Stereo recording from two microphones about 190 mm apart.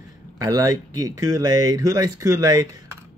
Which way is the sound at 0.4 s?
20° right (ahead or behind).